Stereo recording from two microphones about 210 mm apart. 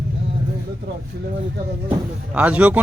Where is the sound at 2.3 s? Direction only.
5° right (ahead or behind).